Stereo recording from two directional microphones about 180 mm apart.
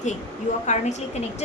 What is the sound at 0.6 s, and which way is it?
Speech, 40° left (ahead or behind).